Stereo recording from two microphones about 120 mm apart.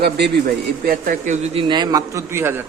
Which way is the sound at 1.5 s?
45° right (ahead or behind).